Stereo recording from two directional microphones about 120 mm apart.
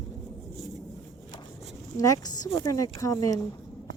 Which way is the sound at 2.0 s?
30° left (ahead or behind).